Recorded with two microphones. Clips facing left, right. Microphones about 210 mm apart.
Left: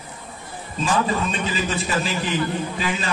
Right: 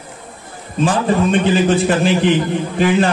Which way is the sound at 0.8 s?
65° right (ahead or behind).